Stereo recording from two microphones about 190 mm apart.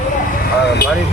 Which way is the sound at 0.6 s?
60° left (ahead or behind).